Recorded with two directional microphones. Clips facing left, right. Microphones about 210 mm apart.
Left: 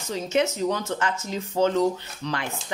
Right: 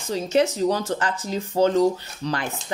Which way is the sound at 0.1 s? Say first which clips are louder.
Right 3 dB; 35° right (ahead or behind).